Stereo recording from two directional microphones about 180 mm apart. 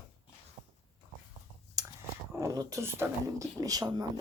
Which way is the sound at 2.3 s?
20° right (ahead or behind).